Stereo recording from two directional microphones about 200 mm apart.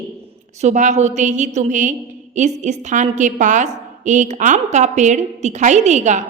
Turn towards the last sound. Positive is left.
turn(degrees=-35)  # may be behind; listen again after turning